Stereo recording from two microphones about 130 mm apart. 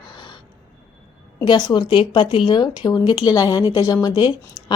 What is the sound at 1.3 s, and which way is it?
A woman's voice, 35° left (ahead or behind).